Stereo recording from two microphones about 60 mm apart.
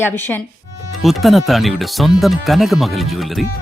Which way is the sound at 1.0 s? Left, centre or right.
Centre.